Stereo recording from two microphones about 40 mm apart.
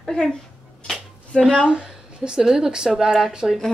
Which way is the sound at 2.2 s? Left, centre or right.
Centre.